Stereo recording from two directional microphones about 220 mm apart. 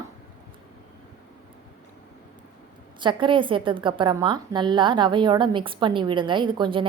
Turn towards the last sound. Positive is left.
turn(degrees=-20)  # may be behind; listen again after turning